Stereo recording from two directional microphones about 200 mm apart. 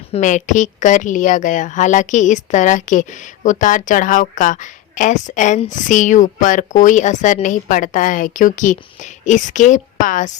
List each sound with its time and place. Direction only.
0.1 s a woman's voice: 35° left (ahead or behind)